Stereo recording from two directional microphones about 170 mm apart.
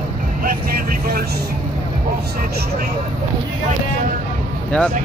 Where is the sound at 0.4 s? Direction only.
60° right (ahead or behind).